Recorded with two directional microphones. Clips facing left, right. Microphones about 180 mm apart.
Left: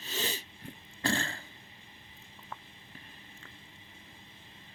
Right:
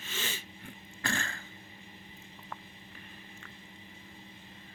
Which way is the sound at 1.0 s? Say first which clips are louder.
Left 4 dB; 30° left (ahead or behind).